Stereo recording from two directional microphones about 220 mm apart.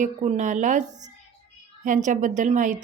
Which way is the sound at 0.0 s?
35° right (ahead or behind).